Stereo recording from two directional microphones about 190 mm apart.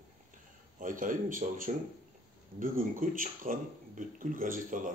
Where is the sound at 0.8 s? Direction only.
45° right (ahead or behind).